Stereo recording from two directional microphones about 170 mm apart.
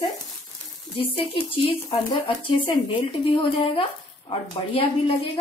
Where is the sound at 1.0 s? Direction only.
30° left (ahead or behind).